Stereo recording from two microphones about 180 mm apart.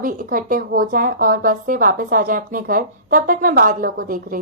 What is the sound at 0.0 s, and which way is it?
Speech, 50° right (ahead or behind).